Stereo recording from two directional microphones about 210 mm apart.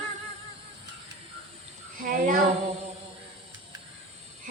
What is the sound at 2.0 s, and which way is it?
Speech, 40° right (ahead or behind).